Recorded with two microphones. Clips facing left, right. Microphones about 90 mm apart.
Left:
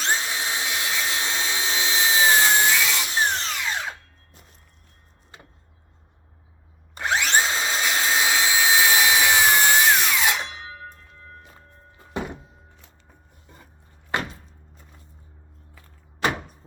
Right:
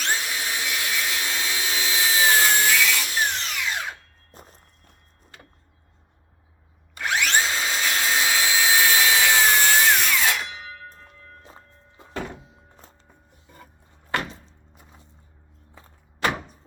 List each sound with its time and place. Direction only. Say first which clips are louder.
0.0 s tools: left 1 dB; 25° left (ahead or behind)
4.3 s walk: right 9 dB; 40° right (ahead or behind)
6.9 s wood: left 1 dB; 25° left (ahead or behind)
11.4 s music: right 1 dB; 25° right (ahead or behind)
12.1 s music: left 2 dB; 20° left (ahead or behind)